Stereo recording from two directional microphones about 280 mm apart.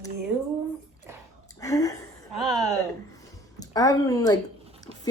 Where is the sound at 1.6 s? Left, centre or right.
Centre.